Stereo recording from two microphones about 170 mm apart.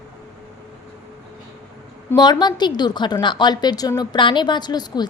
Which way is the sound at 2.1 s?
25° left (ahead or behind).